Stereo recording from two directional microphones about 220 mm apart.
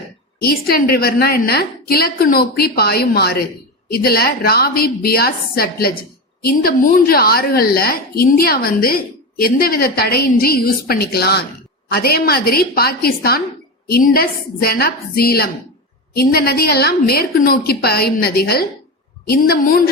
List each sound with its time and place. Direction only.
0.4 s a woman's voice: 45° left (ahead or behind)